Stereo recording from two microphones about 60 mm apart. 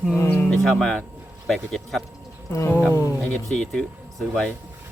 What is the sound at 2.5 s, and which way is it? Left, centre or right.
Speech, left.